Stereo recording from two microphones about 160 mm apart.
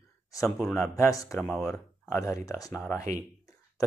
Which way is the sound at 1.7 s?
20° left (ahead or behind).